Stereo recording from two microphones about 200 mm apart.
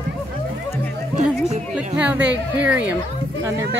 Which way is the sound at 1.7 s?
5° right (ahead or behind).